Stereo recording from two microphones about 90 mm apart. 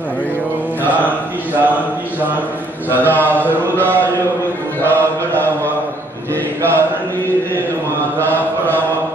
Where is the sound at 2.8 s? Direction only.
20° left (ahead or behind).